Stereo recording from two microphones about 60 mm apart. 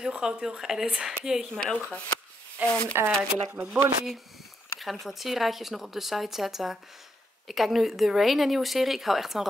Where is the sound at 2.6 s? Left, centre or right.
Right.